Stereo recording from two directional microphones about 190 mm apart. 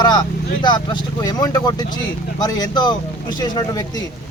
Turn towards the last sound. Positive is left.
turn(degrees=20)  # may be behind; listen again after turning